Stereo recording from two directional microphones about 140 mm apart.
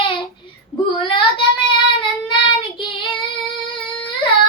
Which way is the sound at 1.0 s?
35° left (ahead or behind).